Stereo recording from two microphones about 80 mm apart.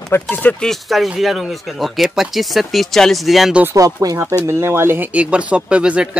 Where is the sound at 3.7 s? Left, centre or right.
Right.